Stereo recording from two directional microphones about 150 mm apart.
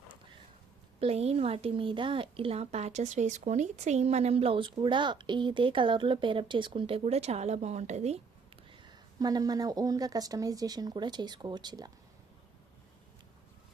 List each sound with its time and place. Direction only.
0.9 s a child's voice: 40° right (ahead or behind)
8.7 s speech: 30° right (ahead or behind)